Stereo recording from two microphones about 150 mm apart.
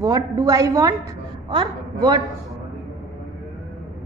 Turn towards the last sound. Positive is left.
turn(degrees=-30)  # may be behind; listen again after turning